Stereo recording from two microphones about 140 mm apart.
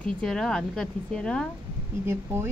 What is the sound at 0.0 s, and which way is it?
A woman's voice, 5° left (ahead or behind).